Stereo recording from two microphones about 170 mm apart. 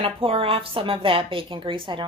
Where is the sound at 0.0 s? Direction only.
35° right (ahead or behind).